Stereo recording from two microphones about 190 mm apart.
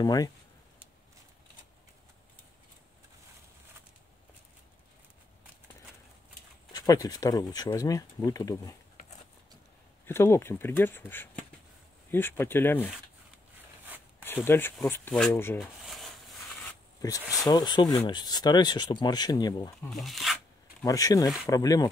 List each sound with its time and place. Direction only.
0.0 s speech: 20° left (ahead or behind)
6.7 s speech: 20° left (ahead or behind)
10.0 s speech: 15° left (ahead or behind)
14.2 s speech: 10° left (ahead or behind)
15.6 s a sound: centre (ahead or behind)
17.2 s speech: centre (ahead or behind)
17.5 s speech: 20° left (ahead or behind)
19.9 s speech: centre (ahead or behind)
20.8 s speech: 20° left (ahead or behind)